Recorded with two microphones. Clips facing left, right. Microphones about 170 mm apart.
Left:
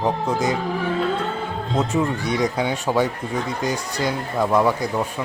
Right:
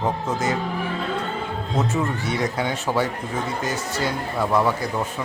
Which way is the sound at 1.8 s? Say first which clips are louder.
Left 2 dB; 15° left (ahead or behind).